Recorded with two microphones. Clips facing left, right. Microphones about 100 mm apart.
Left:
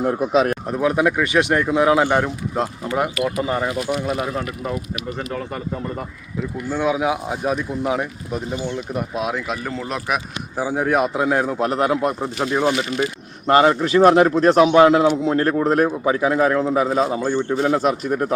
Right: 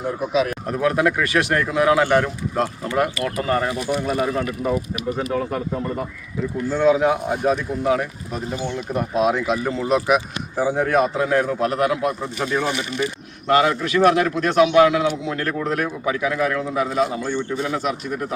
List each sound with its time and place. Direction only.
0.0 s speech: 50° left (ahead or behind)
0.7 s speech: 15° left (ahead or behind)
4.0 s speech: centre (ahead or behind); by 8.4 s 20° left (ahead or behind)
9.1 s speech: centre (ahead or behind); by 12.7 s 20° left (ahead or behind)
13.5 s a man's voice: 40° left (ahead or behind)